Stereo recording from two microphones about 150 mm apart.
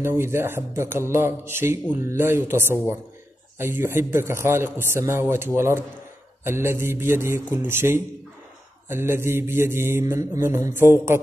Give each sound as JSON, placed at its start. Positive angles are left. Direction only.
{"t": 0.0, "sound": "speech", "side_deg": -20}